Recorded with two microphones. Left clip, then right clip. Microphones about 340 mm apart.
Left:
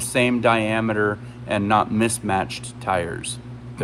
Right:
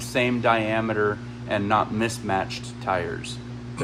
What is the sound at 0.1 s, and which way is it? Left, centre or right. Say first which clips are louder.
Speech: left 3 dB; left.